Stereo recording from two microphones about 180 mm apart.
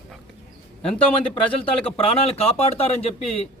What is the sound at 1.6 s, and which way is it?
Speech, 35° left (ahead or behind).